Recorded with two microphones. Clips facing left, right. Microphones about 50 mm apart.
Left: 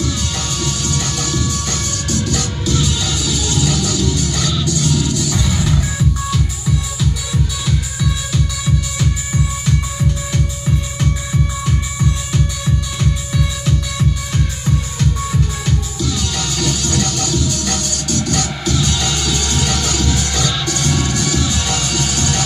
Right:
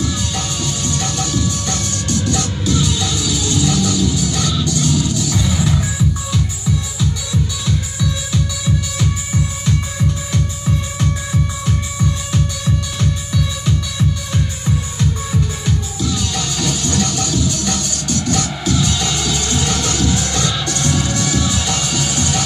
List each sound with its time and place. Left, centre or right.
0.0 s music: centre
2.6 s music: centre
7.6 s music: centre
15.6 s music: centre